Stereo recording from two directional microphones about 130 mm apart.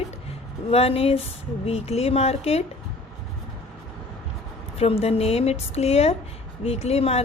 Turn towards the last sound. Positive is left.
turn(degrees=50)  # may be behind; listen again after turning